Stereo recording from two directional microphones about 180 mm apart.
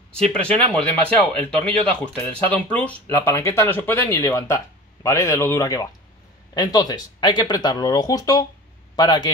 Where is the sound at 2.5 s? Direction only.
10° left (ahead or behind).